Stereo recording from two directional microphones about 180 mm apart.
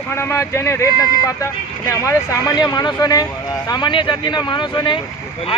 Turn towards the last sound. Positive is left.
turn(degrees=25)  # may be behind; listen again after turning